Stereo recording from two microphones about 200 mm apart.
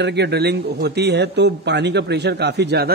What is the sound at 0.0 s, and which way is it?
A man's voice, 55° right (ahead or behind).